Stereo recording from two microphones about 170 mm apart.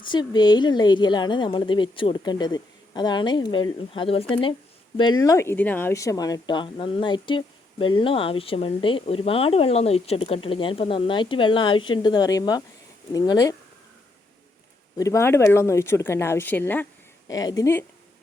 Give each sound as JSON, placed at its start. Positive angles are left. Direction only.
{"t": 0.0, "sound": "speech", "side_deg": 25}
{"t": 14.9, "sound": "speech", "side_deg": 20}